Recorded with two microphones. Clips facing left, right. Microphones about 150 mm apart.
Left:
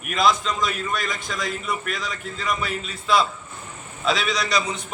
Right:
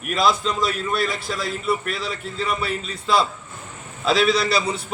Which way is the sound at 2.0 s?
35° right (ahead or behind).